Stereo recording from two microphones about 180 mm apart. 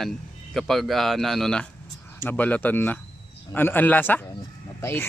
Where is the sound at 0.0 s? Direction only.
Centre (ahead or behind).